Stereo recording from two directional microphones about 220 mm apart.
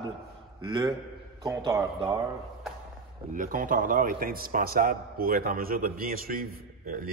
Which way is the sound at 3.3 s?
40° right (ahead or behind).